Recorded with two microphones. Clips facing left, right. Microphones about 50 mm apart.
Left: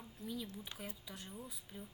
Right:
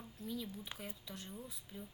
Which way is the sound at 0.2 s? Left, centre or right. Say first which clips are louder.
Right 1 dB; centre.